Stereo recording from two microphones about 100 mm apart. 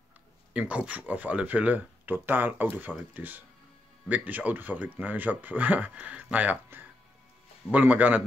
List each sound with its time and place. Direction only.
0.5 s speech: 10° right (ahead or behind)